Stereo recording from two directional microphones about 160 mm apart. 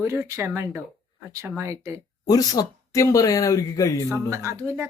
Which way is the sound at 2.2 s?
25° left (ahead or behind).